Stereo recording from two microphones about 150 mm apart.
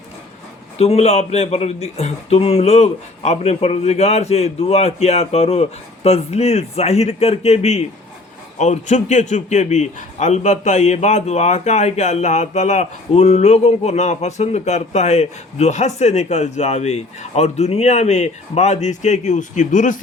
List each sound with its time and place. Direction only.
0.8 s a man's voice: 45° left (ahead or behind)